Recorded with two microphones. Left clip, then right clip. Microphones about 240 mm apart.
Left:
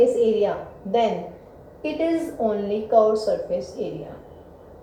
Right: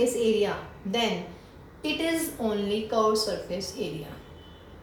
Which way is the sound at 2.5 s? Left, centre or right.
Right.